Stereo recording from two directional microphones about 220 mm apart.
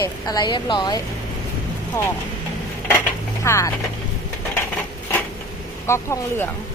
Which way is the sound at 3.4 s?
15° left (ahead or behind).